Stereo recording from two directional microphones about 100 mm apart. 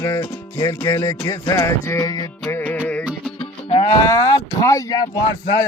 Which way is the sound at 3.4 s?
90° left.